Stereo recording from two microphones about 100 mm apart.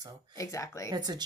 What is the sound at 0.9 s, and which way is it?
Speech, 45° right (ahead or behind).